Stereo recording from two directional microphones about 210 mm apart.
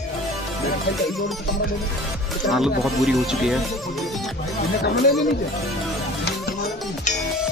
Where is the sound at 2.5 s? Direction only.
Centre (ahead or behind).